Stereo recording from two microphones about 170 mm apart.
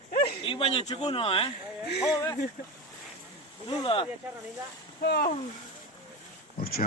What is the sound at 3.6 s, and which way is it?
Speech, 30° left (ahead or behind).